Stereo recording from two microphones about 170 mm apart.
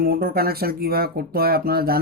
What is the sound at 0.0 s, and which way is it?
Speech, 60° right (ahead or behind).